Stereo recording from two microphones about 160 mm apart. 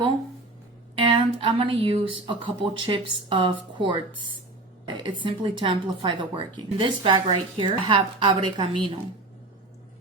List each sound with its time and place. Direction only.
0.9 s speech: 35° right (ahead or behind)
5.2 s speech: 30° right (ahead or behind)